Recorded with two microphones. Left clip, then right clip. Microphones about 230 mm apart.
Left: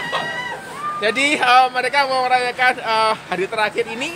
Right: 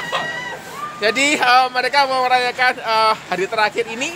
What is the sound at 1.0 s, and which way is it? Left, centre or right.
Speech, right.